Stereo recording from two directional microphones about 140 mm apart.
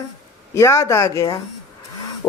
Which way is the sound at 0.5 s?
20° left (ahead or behind).